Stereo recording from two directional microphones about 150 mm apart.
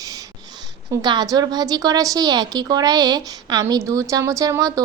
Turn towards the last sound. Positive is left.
turn(degrees=-25)  # may be behind; listen again after turning